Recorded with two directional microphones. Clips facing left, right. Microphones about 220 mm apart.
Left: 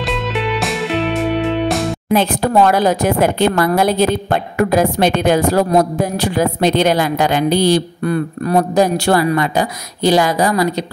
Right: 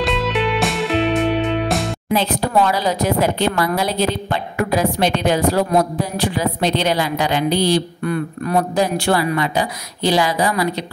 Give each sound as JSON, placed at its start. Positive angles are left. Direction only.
{"t": 0.0, "sound": "music", "side_deg": 0}
{"t": 2.1, "sound": "speech", "side_deg": 50}